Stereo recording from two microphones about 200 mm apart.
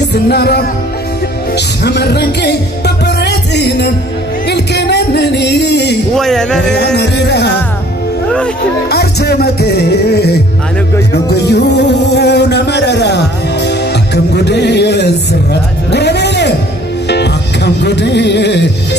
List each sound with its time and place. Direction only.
0.1 s music: 55° left (ahead or behind)
1.9 s music: 55° left (ahead or behind)
6.1 s a sound: centre (ahead or behind)
6.6 s music: 60° left (ahead or behind)
8.9 s music: 55° left (ahead or behind)